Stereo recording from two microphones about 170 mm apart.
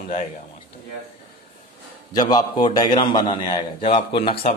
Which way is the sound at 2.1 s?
20° left (ahead or behind).